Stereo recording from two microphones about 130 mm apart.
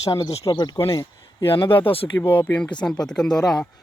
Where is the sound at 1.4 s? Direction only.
45° left (ahead or behind).